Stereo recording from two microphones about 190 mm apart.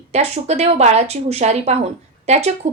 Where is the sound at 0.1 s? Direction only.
35° right (ahead or behind).